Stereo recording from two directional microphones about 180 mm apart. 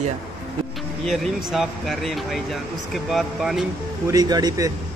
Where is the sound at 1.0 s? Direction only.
Centre (ahead or behind).